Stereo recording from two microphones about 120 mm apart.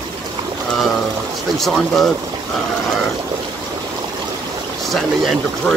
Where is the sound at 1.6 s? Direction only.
Centre (ahead or behind).